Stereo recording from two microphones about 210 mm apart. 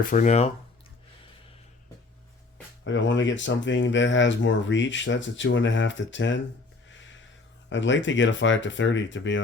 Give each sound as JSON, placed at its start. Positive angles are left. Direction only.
{"t": 0.0, "sound": "speech", "side_deg": 40}
{"t": 2.8, "sound": "speech", "side_deg": 60}
{"t": 7.7, "sound": "speech", "side_deg": 60}